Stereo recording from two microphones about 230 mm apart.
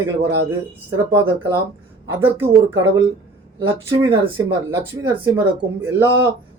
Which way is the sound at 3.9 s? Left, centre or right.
Centre.